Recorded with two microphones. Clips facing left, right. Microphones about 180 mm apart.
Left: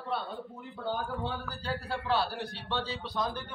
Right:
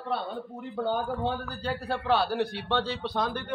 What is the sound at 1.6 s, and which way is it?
A man's voice, 60° right (ahead or behind).